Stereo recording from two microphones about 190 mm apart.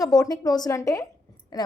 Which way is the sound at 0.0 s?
20° left (ahead or behind).